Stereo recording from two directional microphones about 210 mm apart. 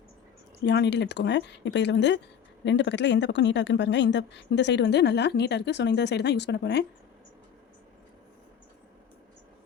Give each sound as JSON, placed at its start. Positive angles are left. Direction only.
{"t": 0.6, "sound": "speech", "side_deg": 55}